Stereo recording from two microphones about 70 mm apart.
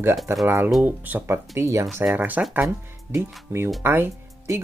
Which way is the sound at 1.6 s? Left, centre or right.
Right.